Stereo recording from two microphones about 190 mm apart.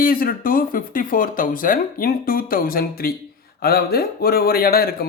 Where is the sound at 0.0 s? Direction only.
50° left (ahead or behind).